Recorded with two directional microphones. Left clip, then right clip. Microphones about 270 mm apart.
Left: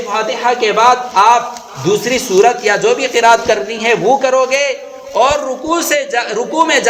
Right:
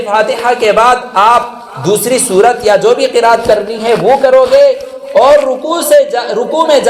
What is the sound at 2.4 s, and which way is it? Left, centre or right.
Speech, left.